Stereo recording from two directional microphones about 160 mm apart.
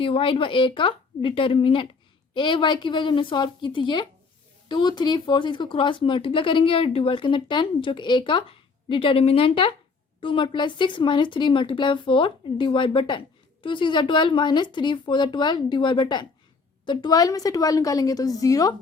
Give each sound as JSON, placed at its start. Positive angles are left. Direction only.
{"t": 0.0, "sound": "speech", "side_deg": 35}